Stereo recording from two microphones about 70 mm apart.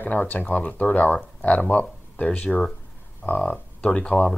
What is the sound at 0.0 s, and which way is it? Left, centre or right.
Speech, left.